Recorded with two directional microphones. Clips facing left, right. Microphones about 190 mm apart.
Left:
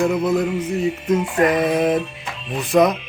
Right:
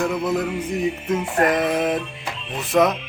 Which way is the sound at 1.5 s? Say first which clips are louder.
Left 4 dB; centre (ahead or behind).